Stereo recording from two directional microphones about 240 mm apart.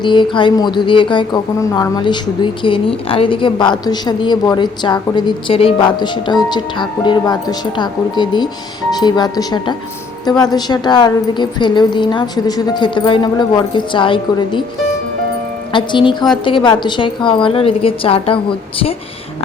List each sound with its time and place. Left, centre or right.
0.0 s a woman's voice: centre